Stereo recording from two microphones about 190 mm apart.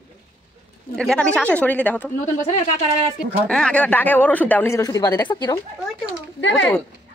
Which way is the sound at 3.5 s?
5° left (ahead or behind).